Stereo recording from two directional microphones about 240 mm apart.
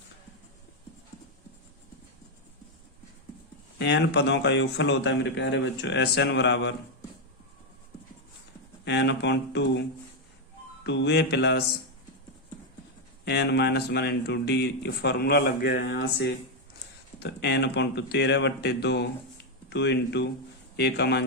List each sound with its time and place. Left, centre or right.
3.8 s speech: left
8.8 s speech: left
10.8 s speech: left
13.2 s speech: left